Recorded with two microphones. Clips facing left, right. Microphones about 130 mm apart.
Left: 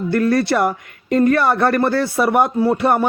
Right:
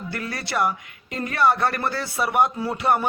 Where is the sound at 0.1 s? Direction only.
50° left (ahead or behind).